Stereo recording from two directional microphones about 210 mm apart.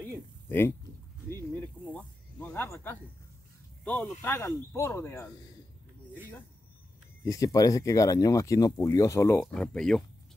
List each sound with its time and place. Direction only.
0.5 s speech: 10° left (ahead or behind)
1.8 s snake: 5° right (ahead or behind)
2.3 s speech: 10° left (ahead or behind)
7.2 s speech: 15° left (ahead or behind)
9.4 s speech: centre (ahead or behind)